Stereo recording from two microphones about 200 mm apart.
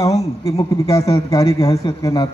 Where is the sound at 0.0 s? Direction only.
15° left (ahead or behind).